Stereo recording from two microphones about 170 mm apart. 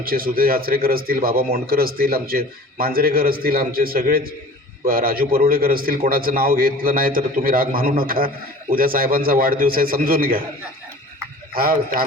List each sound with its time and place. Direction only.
0.0 s a man's voice: 60° right (ahead or behind)
11.5 s a man's voice: 60° right (ahead or behind)